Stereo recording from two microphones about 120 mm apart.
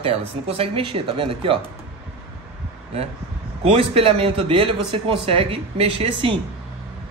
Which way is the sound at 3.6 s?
55° right (ahead or behind).